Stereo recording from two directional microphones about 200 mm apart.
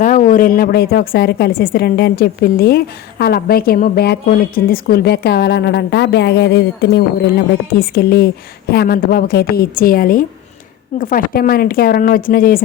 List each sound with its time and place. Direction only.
0.0 s a woman's voice: 40° left (ahead or behind)